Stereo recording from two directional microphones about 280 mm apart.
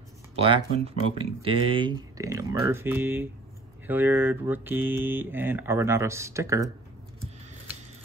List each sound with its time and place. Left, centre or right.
0.4 s speech: right